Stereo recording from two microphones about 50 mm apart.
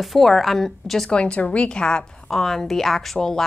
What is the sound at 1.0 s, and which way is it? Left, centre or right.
A woman's voice, left.